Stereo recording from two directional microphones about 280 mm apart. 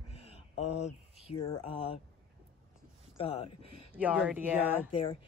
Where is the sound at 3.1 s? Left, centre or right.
Centre.